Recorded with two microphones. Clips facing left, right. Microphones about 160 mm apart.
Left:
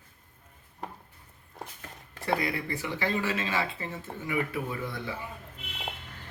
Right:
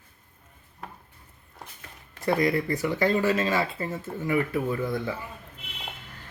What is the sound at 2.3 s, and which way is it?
Speech, 40° right (ahead or behind).